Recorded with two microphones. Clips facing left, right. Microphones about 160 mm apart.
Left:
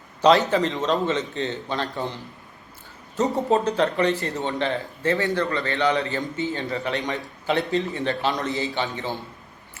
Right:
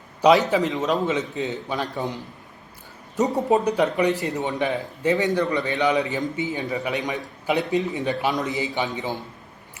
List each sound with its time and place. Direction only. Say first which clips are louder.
0.2 s a man's voice: right 1 dB; 5° right (ahead or behind)
3.3 s a man's voice: right 1 dB; 15° right (ahead or behind)